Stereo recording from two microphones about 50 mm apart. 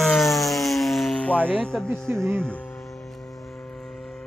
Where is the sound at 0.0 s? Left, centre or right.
Centre.